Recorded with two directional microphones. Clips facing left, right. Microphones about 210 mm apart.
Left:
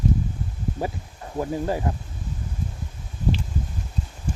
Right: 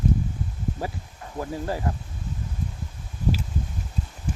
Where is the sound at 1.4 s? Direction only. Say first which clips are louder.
Left 4 dB; 20° left (ahead or behind).